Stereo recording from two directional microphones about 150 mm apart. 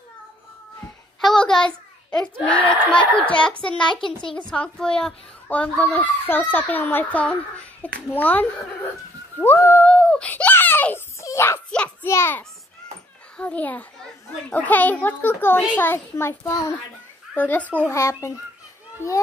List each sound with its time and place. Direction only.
1.2 s a sound: 5° left (ahead or behind)
2.4 s a child's voice: 10° left (ahead or behind)
3.8 s a child's voice: 30° left (ahead or behind)
4.4 s a child's voice: 5° left (ahead or behind)
9.4 s a sound: 15° left (ahead or behind)
12.1 s a child's voice: 15° left (ahead or behind)